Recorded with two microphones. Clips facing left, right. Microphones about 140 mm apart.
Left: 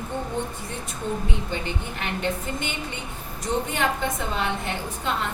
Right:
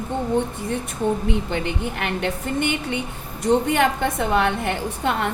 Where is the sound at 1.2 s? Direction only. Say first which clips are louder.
Right 6 dB; 65° right (ahead or behind).